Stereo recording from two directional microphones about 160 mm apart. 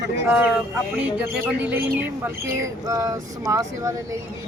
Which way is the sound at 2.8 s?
20° right (ahead or behind).